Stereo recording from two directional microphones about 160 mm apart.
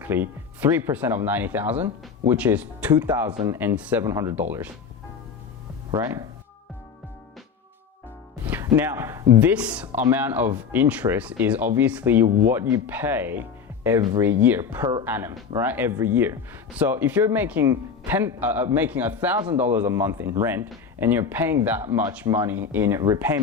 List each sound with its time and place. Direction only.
0.0 s speech: 10° right (ahead or behind)
5.9 s speech: 20° right (ahead or behind)
8.4 s speech: 15° right (ahead or behind)
9.5 s speech: 10° right (ahead or behind)